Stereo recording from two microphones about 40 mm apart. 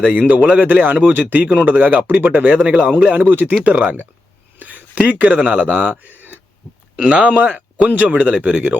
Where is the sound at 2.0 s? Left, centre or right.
Right.